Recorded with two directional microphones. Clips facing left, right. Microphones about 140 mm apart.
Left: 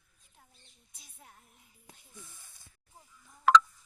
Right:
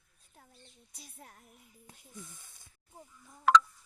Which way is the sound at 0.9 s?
60° right (ahead or behind).